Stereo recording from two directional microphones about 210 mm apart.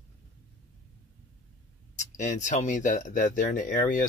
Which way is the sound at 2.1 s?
35° left (ahead or behind).